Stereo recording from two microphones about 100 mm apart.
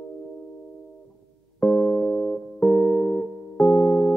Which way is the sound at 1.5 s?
20° left (ahead or behind).